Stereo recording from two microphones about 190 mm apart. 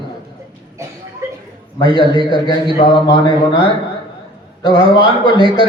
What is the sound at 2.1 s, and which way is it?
Speech, 25° right (ahead or behind).